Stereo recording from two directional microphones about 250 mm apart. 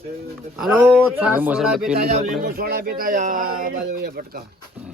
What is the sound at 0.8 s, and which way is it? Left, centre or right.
Speech, centre.